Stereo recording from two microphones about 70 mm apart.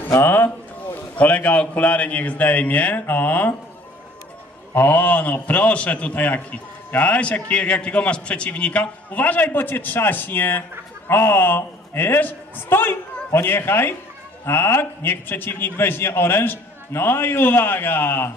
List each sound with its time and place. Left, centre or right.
0.0 s a sound: left
1.1 s a man's voice: left
4.7 s a man's voice: left